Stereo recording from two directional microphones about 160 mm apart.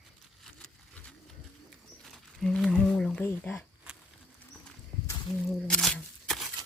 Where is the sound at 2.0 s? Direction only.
Centre (ahead or behind).